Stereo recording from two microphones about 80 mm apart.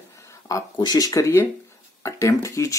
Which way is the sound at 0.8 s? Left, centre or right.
Left.